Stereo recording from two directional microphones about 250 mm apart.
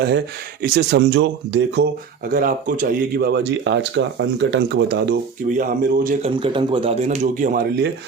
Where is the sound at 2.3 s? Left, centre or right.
Right.